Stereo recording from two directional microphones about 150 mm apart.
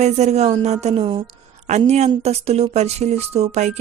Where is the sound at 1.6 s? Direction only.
50° right (ahead or behind).